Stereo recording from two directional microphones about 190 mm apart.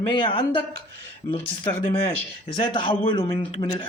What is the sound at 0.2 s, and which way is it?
Speech, 25° left (ahead or behind).